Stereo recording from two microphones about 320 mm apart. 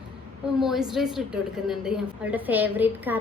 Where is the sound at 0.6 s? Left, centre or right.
Centre.